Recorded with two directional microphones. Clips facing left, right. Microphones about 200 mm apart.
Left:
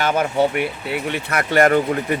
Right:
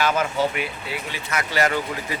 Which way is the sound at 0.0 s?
55° left (ahead or behind).